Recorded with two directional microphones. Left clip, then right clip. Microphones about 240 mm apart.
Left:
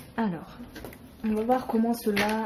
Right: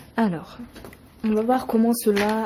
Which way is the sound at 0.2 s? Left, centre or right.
Right.